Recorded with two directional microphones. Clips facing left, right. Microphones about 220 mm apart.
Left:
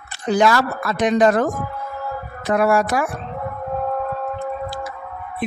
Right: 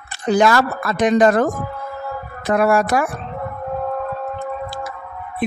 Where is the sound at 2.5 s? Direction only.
50° right (ahead or behind).